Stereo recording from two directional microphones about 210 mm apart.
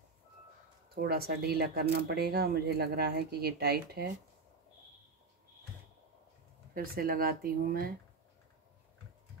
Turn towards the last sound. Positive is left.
turn(degrees=-45)  # may be behind; listen again after turning